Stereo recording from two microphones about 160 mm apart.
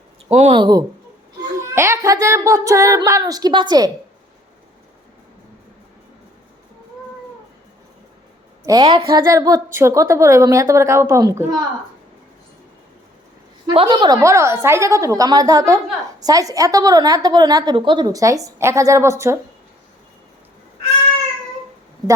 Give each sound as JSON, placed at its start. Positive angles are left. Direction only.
{"t": 0.3, "sound": "speech", "side_deg": -40}
{"t": 0.6, "sound": "a woman's voice", "side_deg": -25}
{"t": 1.6, "sound": "a woman's voice", "side_deg": -15}
{"t": 8.6, "sound": "a woman's voice", "side_deg": -25}
{"t": 13.7, "sound": "a woman's voice", "side_deg": -30}
{"t": 14.2, "sound": "a woman's voice", "side_deg": -20}